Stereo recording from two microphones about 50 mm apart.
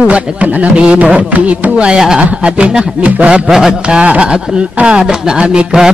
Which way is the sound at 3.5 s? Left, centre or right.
Centre.